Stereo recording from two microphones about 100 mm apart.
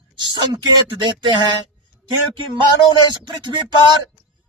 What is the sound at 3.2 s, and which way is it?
Speech, 50° right (ahead or behind).